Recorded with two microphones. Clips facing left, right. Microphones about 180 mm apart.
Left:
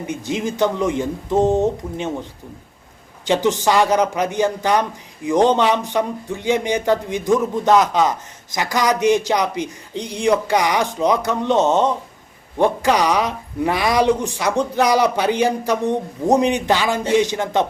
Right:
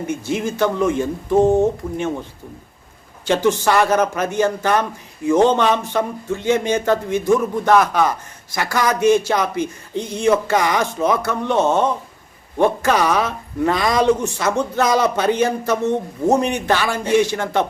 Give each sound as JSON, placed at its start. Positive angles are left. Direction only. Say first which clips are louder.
{"t": 0.1, "sound": "a man's voice", "louder": "even", "side_deg": 15}
{"t": 3.2, "sound": "a man's voice", "louder": "right 1 dB", "side_deg": 15}